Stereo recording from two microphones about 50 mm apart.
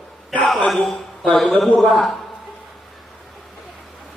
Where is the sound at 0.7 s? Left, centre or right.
Centre.